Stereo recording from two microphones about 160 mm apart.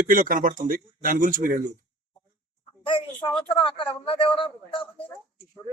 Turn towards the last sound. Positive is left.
turn(degrees=30)  # may be behind; listen again after turning